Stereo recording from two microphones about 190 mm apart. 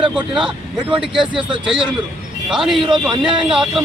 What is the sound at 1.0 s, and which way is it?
Speech, 5° right (ahead or behind).